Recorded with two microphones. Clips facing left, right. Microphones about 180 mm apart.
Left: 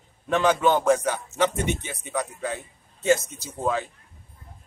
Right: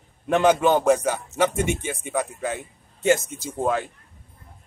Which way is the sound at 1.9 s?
45° right (ahead or behind).